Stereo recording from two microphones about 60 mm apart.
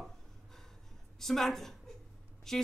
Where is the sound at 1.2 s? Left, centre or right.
Centre.